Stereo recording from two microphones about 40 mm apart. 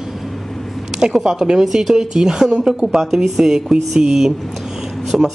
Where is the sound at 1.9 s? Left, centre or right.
Centre.